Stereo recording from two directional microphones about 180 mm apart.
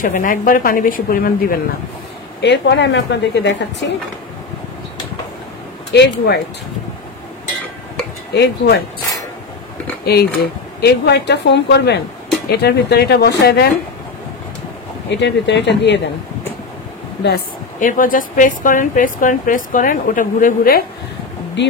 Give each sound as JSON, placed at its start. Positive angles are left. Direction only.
{"t": 0.0, "sound": "a woman's voice", "side_deg": 50}
{"t": 2.4, "sound": "speech", "side_deg": 70}
{"t": 5.9, "sound": "speech", "side_deg": 70}
{"t": 8.3, "sound": "speech", "side_deg": 65}
{"t": 10.0, "sound": "speech", "side_deg": 60}
{"t": 15.0, "sound": "speech", "side_deg": 75}
{"t": 17.7, "sound": "a woman's voice", "side_deg": 50}